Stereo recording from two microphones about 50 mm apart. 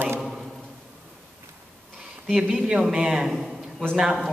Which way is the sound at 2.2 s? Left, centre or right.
Centre.